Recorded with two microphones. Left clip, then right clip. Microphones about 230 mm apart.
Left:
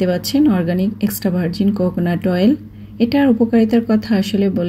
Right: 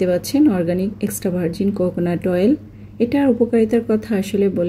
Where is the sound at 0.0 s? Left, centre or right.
Centre.